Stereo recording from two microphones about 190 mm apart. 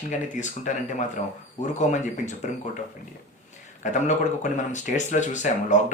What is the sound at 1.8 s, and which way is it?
Speech, 40° left (ahead or behind).